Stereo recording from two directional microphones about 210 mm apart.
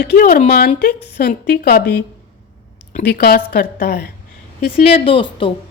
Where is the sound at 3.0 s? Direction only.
50° left (ahead or behind).